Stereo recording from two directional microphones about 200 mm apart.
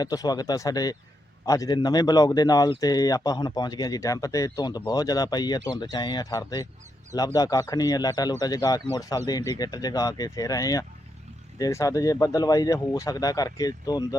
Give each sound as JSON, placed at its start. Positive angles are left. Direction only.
{"t": 0.0, "sound": "speech", "side_deg": 20}